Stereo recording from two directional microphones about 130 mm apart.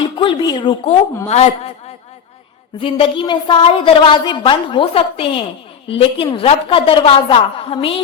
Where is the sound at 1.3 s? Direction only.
55° left (ahead or behind).